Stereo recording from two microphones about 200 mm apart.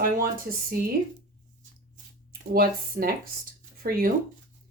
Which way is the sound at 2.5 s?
45° right (ahead or behind).